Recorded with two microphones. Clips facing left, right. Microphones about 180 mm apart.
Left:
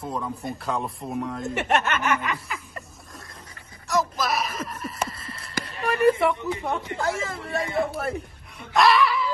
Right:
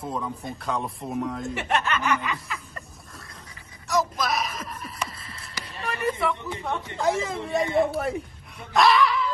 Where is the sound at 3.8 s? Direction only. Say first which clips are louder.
Even; centre (ahead or behind).